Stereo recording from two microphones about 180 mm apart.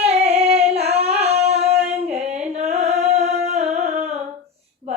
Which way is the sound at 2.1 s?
35° right (ahead or behind).